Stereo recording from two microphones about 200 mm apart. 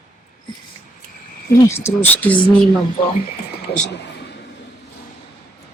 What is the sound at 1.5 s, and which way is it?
Speech, 15° left (ahead or behind).